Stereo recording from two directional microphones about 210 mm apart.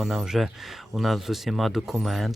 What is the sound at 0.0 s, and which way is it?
Speech, centre (ahead or behind).